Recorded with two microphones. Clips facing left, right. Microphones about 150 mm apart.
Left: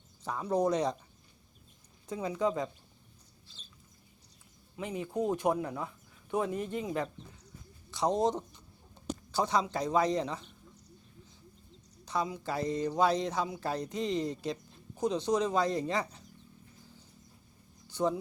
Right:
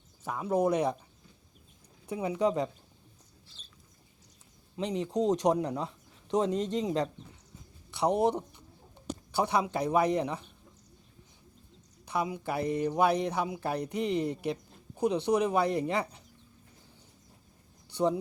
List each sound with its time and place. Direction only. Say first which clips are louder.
0.3 s speech: right 2 dB; 10° right (ahead or behind)
2.0 s speech: right 3 dB; 15° right (ahead or behind)
4.8 s speech: right 4 dB; 20° right (ahead or behind)
12.0 s speech: right 2 dB; 10° right (ahead or behind)
17.9 s speech: right 3 dB; 15° right (ahead or behind)